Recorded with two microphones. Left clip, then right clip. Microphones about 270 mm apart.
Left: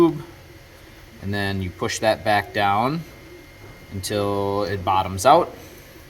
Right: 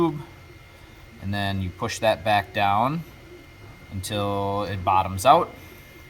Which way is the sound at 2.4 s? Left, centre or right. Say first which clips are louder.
Left 1 dB; right.